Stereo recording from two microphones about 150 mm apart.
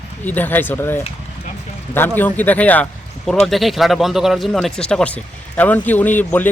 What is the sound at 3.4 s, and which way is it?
Speech, centre (ahead or behind).